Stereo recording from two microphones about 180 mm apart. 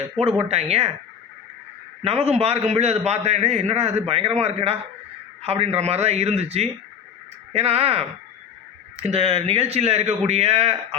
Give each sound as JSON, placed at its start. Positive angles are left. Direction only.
{"t": 0.4, "sound": "a man's voice", "side_deg": -35}
{"t": 2.0, "sound": "a man's voice", "side_deg": -35}